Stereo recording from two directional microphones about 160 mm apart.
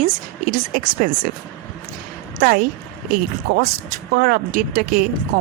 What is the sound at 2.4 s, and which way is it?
Speech, 65° right (ahead or behind).